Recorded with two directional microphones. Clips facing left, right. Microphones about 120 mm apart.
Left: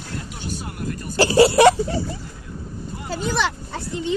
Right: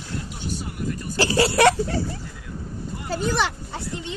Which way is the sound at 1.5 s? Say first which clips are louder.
Left 4 dB; 5° left (ahead or behind).